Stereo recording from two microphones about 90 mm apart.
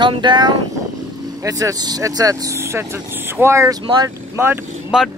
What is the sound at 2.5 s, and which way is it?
Speech, 30° right (ahead or behind).